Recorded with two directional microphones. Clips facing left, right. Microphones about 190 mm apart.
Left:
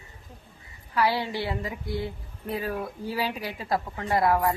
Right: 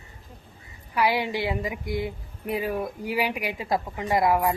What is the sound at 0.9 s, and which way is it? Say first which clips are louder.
Speech: right 1 dB; 15° right (ahead or behind).